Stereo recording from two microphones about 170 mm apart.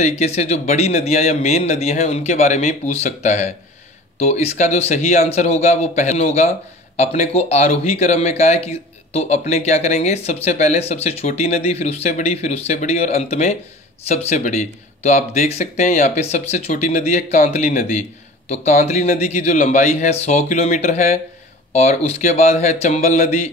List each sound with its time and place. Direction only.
0.2 s speech: 40° left (ahead or behind)